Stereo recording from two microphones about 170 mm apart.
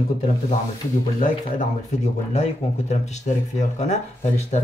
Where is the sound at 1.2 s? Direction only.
45° left (ahead or behind).